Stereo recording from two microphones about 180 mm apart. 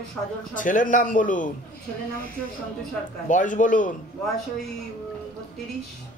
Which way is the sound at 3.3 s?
45° left (ahead or behind).